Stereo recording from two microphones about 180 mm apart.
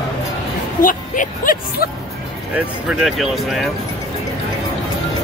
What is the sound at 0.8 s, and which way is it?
Speech, 50° left (ahead or behind).